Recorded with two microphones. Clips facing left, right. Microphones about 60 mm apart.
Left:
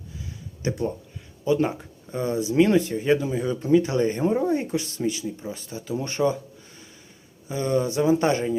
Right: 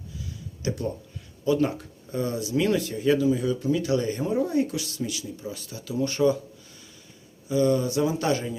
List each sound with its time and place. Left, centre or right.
0.6 s speech: left
7.4 s speech: left